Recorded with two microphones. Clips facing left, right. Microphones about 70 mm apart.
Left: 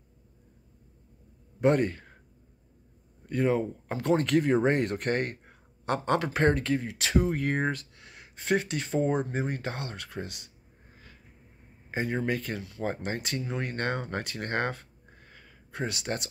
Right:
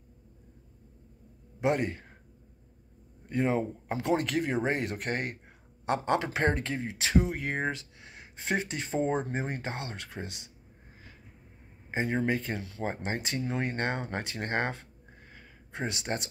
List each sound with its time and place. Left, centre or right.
1.6 s a man's voice: centre
3.3 s speech: centre
11.9 s speech: right
15.3 s a sound: right